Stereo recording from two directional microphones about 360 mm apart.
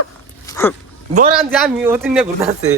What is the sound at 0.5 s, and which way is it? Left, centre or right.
Speech, centre.